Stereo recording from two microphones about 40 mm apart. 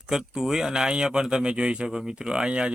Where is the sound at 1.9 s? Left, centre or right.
Centre.